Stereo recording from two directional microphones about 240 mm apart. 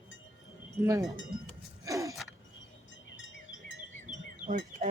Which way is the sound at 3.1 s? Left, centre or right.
Left.